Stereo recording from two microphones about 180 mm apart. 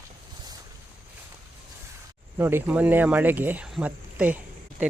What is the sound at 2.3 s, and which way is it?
Speech, 10° right (ahead or behind).